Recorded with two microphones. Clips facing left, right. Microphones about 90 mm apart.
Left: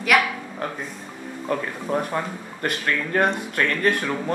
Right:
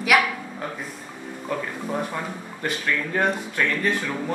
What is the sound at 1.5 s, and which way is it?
Speech, 50° left (ahead or behind).